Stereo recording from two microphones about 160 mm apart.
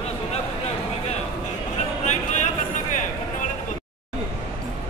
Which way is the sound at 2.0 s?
50° left (ahead or behind).